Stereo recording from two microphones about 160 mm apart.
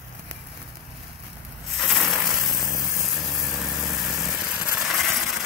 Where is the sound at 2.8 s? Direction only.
15° left (ahead or behind).